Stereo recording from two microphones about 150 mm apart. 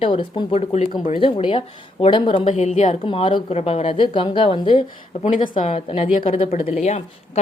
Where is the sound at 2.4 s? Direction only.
50° left (ahead or behind).